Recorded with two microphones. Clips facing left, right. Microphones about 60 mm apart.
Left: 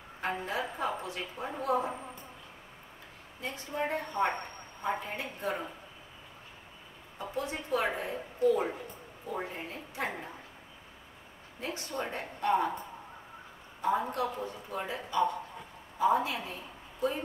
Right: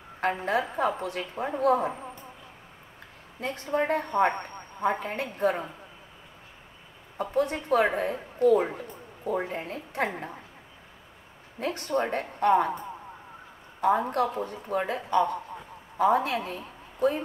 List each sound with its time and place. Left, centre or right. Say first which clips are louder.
0.5 s speech: right 7 dB; right
3.3 s speech: right 7 dB; right
7.2 s speech: right 9 dB; right
11.6 s speech: right 8 dB; right
13.7 s a woman's voice: right 6 dB; right